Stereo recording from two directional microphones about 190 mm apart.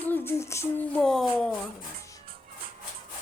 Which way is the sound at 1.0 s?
Centre (ahead or behind).